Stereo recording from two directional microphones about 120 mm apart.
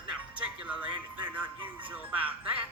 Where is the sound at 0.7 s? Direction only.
15° right (ahead or behind).